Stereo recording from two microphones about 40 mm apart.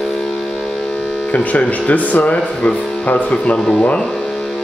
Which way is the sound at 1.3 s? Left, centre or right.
Left.